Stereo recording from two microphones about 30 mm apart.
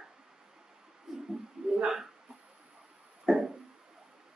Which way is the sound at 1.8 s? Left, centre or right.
Centre.